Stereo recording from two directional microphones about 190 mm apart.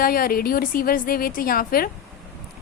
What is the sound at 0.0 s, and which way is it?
A woman's voice, 50° left (ahead or behind).